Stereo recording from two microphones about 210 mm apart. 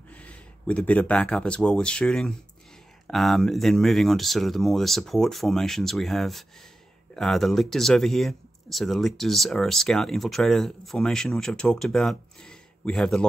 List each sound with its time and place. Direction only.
0.1 s speech: 5° left (ahead or behind)